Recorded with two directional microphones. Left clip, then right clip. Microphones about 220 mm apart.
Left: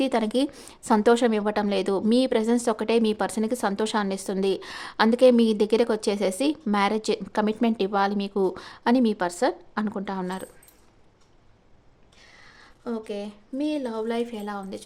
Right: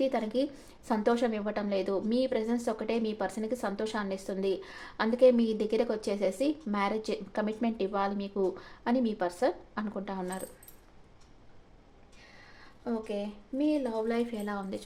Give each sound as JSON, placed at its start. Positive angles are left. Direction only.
{"t": 0.0, "sound": "a woman's voice", "side_deg": 40}
{"t": 12.2, "sound": "speech", "side_deg": 20}